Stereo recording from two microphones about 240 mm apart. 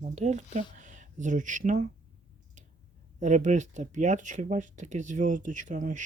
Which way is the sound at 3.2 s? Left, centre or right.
Right.